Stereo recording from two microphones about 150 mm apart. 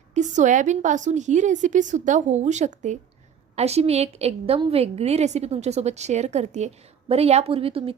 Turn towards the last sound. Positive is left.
turn(degrees=-40)  # may be behind; listen again after turning